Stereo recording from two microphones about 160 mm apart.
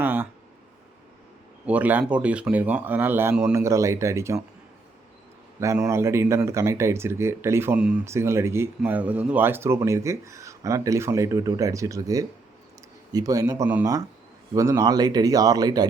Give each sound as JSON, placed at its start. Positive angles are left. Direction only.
{"t": 0.0, "sound": "a sound", "side_deg": -15}
{"t": 1.6, "sound": "speech", "side_deg": -10}
{"t": 5.5, "sound": "speech", "side_deg": -20}